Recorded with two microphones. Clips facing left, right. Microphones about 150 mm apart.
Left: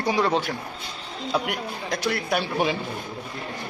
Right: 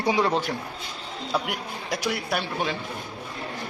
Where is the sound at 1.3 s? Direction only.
Centre (ahead or behind).